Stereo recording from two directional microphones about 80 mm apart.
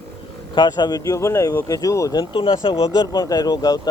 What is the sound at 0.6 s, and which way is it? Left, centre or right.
Speech, left.